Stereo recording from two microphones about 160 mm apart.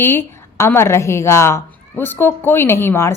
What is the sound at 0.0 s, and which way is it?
A woman's voice, 15° left (ahead or behind).